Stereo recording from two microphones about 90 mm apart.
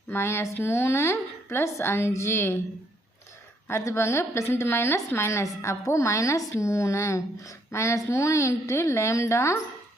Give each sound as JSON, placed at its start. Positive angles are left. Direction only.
{"t": 0.1, "sound": "speech", "side_deg": 30}
{"t": 3.7, "sound": "a woman's voice", "side_deg": 30}